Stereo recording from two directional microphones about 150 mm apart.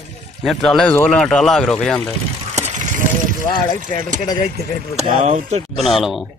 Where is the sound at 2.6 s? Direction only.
50° right (ahead or behind).